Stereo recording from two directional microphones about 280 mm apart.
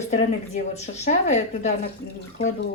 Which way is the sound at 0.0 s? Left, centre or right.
Left.